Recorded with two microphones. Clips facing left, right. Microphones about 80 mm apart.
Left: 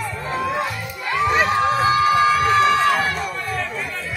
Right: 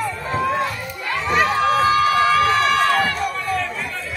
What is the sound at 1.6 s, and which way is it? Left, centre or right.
Run, centre.